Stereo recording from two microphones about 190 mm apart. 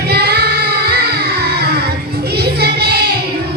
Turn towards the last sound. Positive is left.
turn(degrees=-55)  # may be behind; listen again after turning